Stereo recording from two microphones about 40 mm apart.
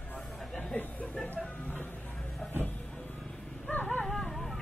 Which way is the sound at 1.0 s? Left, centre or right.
Left.